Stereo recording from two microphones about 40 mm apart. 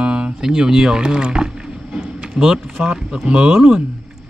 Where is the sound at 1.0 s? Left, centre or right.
Right.